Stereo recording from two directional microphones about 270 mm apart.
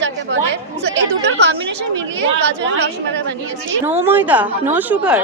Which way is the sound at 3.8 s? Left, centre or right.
Centre.